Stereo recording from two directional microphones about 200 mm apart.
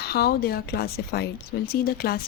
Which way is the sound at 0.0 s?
50° left (ahead or behind).